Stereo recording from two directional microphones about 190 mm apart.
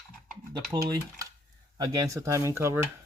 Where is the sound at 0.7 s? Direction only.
20° right (ahead or behind).